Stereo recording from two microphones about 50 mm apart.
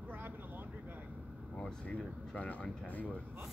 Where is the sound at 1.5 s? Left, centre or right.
Left.